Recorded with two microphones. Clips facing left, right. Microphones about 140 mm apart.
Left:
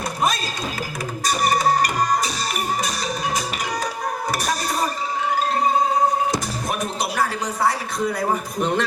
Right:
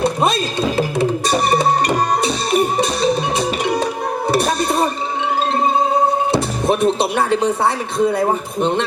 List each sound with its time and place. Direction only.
0.0 s music: 30° right (ahead or behind)
6.3 s speech: 30° right (ahead or behind)